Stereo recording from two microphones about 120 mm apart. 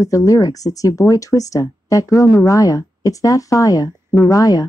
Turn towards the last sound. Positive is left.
turn(degrees=30)  # may be behind; listen again after turning